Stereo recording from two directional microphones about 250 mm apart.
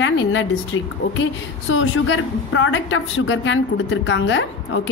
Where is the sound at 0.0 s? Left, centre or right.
Left.